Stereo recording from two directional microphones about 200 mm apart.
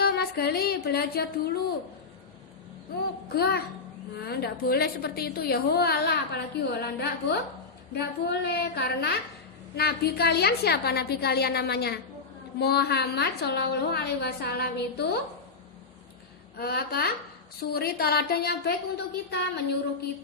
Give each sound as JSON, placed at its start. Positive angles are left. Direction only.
{"t": 0.0, "sound": "music", "side_deg": 50}
{"t": 3.3, "sound": "a woman's voice", "side_deg": 50}
{"t": 16.6, "sound": "a woman's voice", "side_deg": 50}